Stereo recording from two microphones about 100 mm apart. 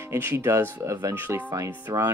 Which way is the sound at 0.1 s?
20° right (ahead or behind).